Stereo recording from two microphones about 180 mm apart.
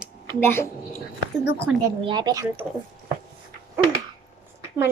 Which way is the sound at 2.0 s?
25° right (ahead or behind).